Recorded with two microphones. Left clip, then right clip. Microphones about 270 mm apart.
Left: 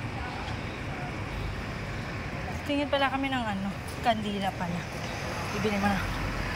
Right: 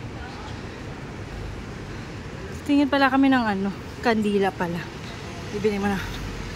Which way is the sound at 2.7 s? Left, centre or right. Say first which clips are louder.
Right 7 dB; centre.